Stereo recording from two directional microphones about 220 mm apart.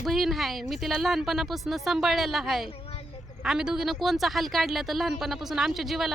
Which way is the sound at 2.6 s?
25° left (ahead or behind).